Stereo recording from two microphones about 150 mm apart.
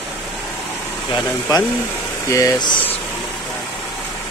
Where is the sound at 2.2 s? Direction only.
20° left (ahead or behind).